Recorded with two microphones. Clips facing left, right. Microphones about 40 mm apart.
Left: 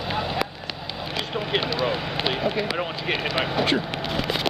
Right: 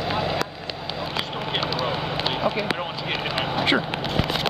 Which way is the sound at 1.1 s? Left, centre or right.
Centre.